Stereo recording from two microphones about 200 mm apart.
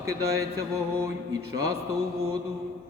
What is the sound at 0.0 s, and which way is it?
Speech, 15° right (ahead or behind).